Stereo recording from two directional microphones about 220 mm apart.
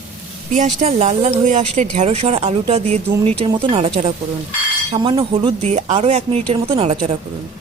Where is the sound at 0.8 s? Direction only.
30° right (ahead or behind).